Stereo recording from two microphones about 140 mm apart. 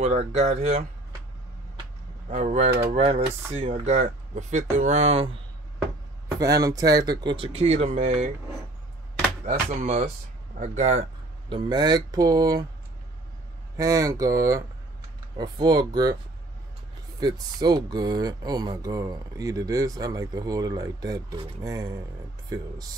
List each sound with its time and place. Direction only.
0.0 s speech: 50° right (ahead or behind)
2.2 s speech: 55° right (ahead or behind)
6.2 s speech: 25° right (ahead or behind); by 8.3 s 55° right (ahead or behind)
9.7 s speech: 55° right (ahead or behind)
11.4 s speech: 35° right (ahead or behind)
13.7 s speech: 25° right (ahead or behind)
17.2 s speech: 30° right (ahead or behind)